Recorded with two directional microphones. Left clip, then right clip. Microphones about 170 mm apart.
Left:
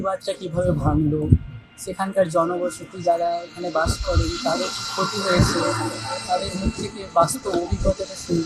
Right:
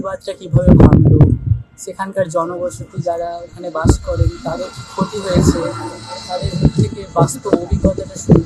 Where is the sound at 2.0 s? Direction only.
15° right (ahead or behind).